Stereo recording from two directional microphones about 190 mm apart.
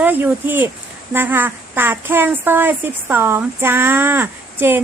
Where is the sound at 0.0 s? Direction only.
10° right (ahead or behind).